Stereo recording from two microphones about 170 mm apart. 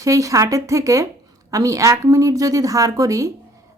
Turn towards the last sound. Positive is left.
turn(degrees=-20)  # may be behind; listen again after turning